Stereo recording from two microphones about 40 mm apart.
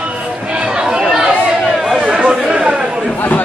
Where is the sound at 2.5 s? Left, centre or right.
Right.